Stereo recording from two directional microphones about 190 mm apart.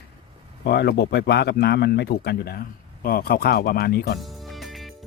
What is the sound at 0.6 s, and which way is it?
A man's voice, 60° left (ahead or behind).